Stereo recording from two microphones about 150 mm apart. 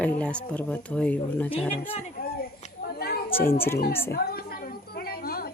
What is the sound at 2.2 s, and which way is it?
Speech, 90° left.